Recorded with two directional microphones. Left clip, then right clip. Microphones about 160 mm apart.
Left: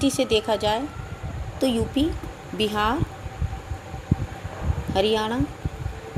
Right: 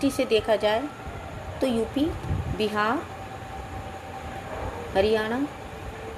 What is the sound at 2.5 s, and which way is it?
Speech, 40° left (ahead or behind).